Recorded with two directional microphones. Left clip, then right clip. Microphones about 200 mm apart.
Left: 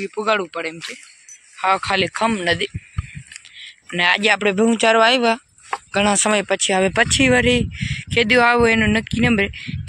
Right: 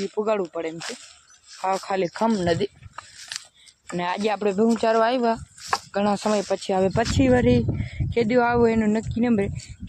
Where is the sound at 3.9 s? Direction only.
5° right (ahead or behind).